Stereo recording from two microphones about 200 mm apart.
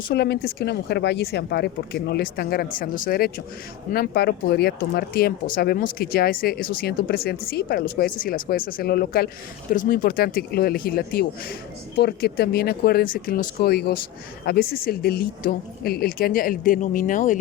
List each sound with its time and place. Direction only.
0.1 s speech: 55° left (ahead or behind)